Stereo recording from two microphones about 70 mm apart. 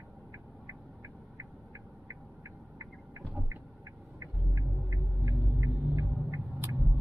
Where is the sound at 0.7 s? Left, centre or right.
Right.